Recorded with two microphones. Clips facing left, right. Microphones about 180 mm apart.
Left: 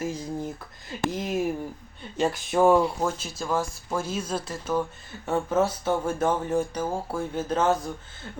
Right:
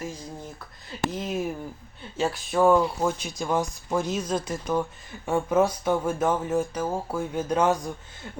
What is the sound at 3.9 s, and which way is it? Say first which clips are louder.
Speech: right 3 dB; 10° left (ahead or behind).